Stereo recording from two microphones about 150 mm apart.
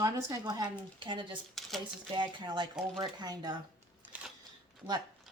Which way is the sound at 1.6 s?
Centre (ahead or behind).